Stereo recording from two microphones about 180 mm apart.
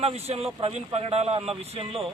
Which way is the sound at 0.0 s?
35° right (ahead or behind).